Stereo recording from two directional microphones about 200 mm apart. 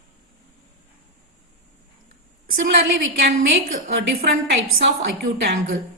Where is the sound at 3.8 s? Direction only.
50° right (ahead or behind).